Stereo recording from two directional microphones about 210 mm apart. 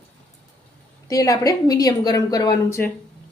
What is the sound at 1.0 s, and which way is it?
A woman's voice, 15° left (ahead or behind).